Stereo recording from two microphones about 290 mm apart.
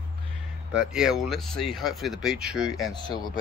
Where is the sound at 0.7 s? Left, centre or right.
Centre.